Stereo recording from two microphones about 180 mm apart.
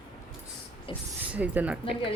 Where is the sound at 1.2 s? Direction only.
10° right (ahead or behind).